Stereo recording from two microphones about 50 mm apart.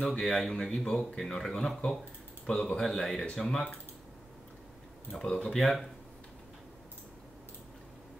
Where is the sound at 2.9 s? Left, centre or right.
Centre.